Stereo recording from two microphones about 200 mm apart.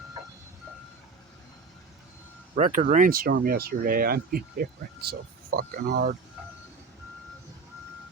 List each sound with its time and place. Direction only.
2.6 s speech: 40° right (ahead or behind)